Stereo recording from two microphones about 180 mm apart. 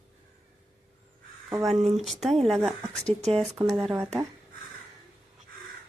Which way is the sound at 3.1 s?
35° right (ahead or behind).